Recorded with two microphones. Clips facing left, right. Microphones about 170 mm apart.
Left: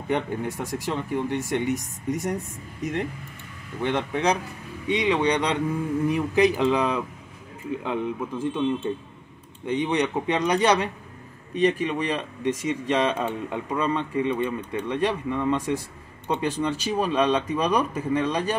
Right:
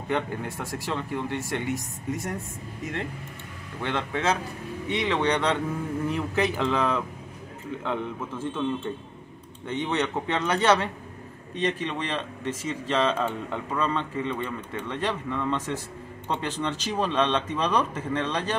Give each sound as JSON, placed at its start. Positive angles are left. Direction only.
{"t": 0.1, "sound": "speech", "side_deg": 20}
{"t": 9.7, "sound": "speech", "side_deg": 15}